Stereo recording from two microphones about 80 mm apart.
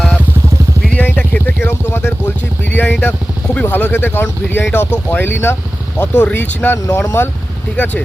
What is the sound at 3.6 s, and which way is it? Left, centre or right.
Speech, left.